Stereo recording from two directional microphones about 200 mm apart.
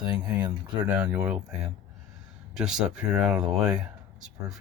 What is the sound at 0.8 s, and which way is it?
Speech, 10° right (ahead or behind).